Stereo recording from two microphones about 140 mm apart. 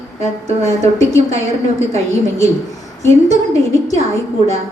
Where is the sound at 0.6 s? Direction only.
50° right (ahead or behind).